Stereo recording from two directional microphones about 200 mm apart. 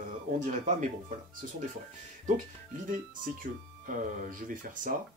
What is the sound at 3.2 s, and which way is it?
Speech, 40° right (ahead or behind).